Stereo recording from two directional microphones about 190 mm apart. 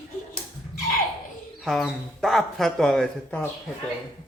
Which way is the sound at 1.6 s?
Centre (ahead or behind).